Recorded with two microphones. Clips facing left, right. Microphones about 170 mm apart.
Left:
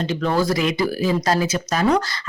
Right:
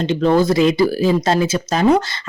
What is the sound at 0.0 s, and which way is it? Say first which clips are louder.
Speech: right 6 dB; 25° right (ahead or behind).